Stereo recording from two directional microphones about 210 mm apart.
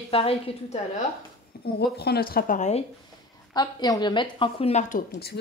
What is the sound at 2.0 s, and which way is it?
Speech, 50° left (ahead or behind).